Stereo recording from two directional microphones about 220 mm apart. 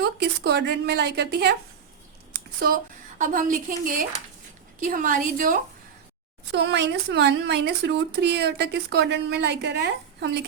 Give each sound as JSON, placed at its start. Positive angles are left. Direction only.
{"t": 0.0, "sound": "speech", "side_deg": -50}
{"t": 2.6, "sound": "a woman's voice", "side_deg": -40}
{"t": 4.8, "sound": "a woman's voice", "side_deg": -35}
{"t": 6.5, "sound": "speech", "side_deg": -50}